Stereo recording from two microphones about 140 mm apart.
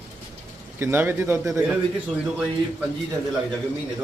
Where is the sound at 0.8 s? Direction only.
15° right (ahead or behind).